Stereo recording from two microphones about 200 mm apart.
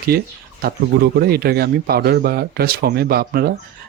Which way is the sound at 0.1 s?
50° right (ahead or behind).